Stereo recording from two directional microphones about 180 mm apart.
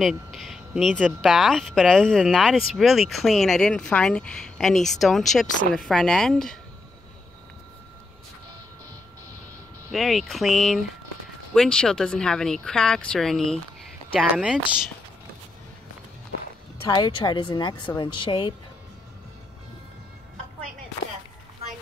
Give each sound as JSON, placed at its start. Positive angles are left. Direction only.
{"t": 0.0, "sound": "speech", "side_deg": 0}
{"t": 9.9, "sound": "speech", "side_deg": 0}
{"t": 16.9, "sound": "speech", "side_deg": 25}